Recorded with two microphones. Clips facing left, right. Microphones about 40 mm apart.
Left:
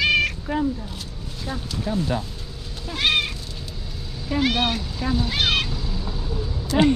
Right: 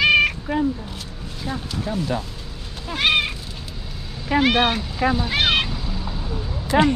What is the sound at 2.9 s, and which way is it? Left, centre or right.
Cat, centre.